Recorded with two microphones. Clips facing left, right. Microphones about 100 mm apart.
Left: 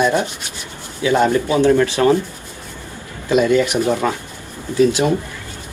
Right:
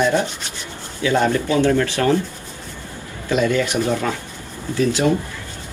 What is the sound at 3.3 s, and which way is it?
Speech, 20° left (ahead or behind).